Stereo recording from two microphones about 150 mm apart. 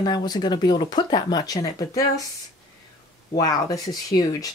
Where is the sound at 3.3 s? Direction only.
25° left (ahead or behind).